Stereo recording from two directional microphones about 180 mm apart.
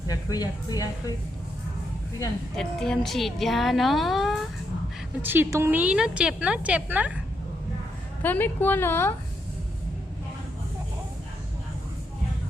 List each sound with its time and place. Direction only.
0.1 s speech: 20° left (ahead or behind)
2.6 s a woman's voice: 5° left (ahead or behind)
5.2 s a woman's voice: 10° right (ahead or behind)
8.2 s a woman's voice: 10° left (ahead or behind)